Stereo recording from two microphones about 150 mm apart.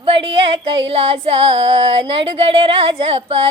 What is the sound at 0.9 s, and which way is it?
Music, 40° right (ahead or behind).